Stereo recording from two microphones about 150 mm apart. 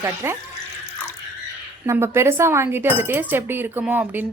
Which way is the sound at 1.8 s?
15° right (ahead or behind).